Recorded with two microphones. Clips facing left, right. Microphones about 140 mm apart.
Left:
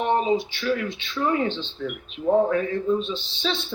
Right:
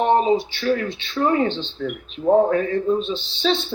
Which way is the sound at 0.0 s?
30° right (ahead or behind).